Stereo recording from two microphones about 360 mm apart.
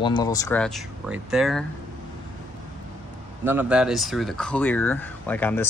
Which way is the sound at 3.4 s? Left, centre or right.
Centre.